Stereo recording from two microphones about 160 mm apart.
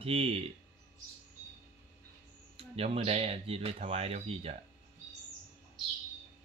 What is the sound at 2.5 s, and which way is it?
Speech, 40° right (ahead or behind).